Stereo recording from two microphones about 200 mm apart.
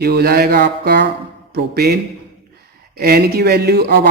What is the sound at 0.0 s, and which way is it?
Speech, 55° right (ahead or behind).